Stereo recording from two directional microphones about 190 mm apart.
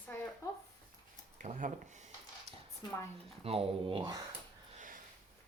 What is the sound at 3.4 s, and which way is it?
Speech, 30° right (ahead or behind).